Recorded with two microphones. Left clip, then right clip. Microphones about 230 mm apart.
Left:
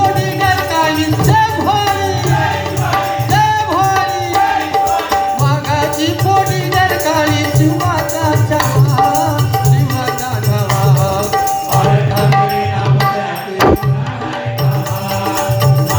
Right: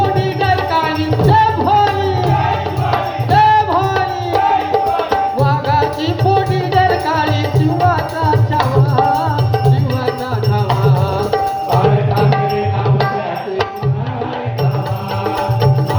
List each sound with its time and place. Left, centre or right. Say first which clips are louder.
0.0 s music: left 2 dB; left
2.9 s music: even; left
5.4 s music: right 1 dB; left